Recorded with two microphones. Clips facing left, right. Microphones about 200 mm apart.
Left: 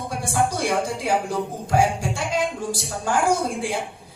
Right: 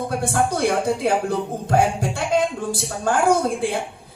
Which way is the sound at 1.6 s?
55° right (ahead or behind).